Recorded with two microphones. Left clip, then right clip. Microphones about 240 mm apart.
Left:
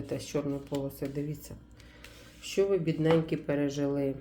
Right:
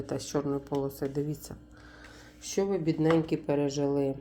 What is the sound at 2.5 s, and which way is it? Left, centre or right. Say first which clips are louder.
Speech: left 1 dB; centre.